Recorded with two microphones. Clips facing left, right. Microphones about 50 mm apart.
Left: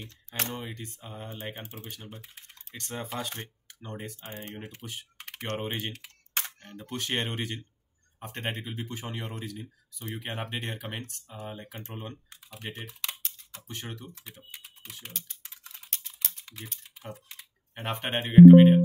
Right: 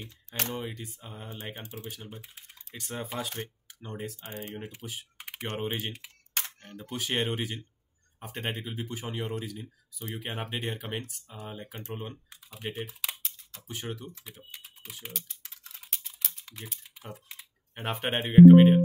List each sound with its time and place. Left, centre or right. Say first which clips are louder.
0.3 s speech: right 1 dB; centre
1.4 s speech: left 1 dB; left
1.9 s speech: right 2 dB; centre
4.2 s speech: right 1 dB; left
5.1 s speech: left 2 dB; centre
14.2 s typing: even; centre
15.8 s typing: even; centre
18.3 s speech: left 1 dB; centre